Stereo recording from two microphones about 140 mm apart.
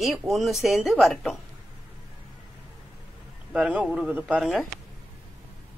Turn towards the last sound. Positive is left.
turn(degrees=0)  # may be behind; listen again after turning